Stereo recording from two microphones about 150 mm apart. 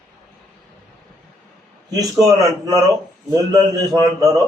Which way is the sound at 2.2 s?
25° right (ahead or behind).